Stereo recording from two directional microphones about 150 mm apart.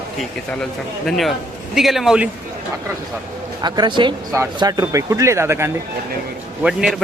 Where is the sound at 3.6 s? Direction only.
30° right (ahead or behind).